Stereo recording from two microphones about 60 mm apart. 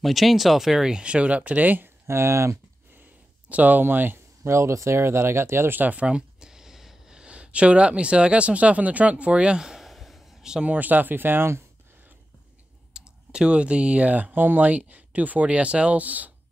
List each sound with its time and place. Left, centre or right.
0.0 s speech: centre; by 1.9 s right
2.0 s speech: right
3.4 s speech: right
4.4 s speech: right
5.8 s speech: right
10.7 s speech: right
12.9 s speech: centre